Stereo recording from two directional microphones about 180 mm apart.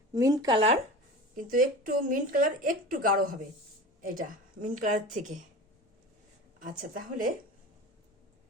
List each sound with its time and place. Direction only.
0.1 s speech: 20° right (ahead or behind)
1.4 s a woman's voice: 50° right (ahead or behind)
6.6 s a woman's voice: 50° right (ahead or behind)